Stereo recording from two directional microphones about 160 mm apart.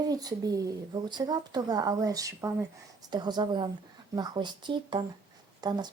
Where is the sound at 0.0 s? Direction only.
25° right (ahead or behind).